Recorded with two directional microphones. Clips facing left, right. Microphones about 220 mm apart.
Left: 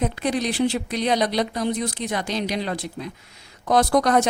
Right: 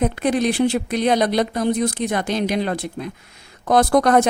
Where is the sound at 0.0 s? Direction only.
55° right (ahead or behind).